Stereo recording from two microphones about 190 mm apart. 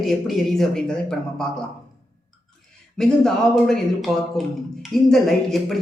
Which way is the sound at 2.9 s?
Centre (ahead or behind).